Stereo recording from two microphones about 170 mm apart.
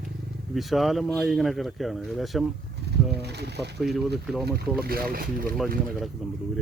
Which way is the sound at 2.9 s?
75° right (ahead or behind).